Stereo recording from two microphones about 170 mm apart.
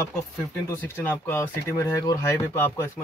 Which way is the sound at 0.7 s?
10° left (ahead or behind).